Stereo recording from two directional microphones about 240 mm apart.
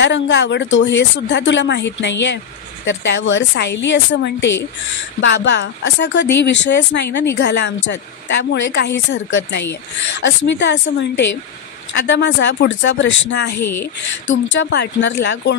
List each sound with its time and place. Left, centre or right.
0.0 s speech: left
13.6 s speech: left
14.3 s speech: left